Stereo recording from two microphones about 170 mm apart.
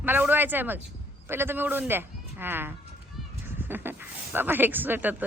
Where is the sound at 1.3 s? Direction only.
15° right (ahead or behind).